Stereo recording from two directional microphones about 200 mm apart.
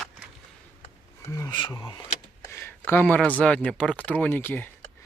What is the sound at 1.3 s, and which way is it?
Speech, 20° left (ahead or behind).